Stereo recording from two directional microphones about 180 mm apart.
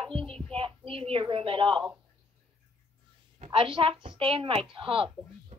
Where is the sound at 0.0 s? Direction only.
30° right (ahead or behind).